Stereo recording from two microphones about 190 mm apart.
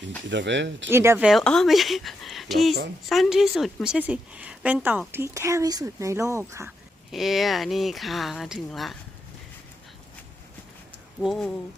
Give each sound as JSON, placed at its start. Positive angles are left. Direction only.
{"t": 0.3, "sound": "speech", "side_deg": -70}
{"t": 0.9, "sound": "a woman's voice", "side_deg": -15}
{"t": 1.3, "sound": "a woman's voice", "side_deg": 0}
{"t": 7.1, "sound": "speech", "side_deg": 0}
{"t": 11.2, "sound": "speech", "side_deg": 0}